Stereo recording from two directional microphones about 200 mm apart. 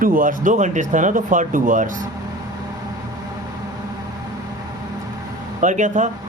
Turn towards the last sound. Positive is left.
turn(degrees=-40)  # may be behind; listen again after turning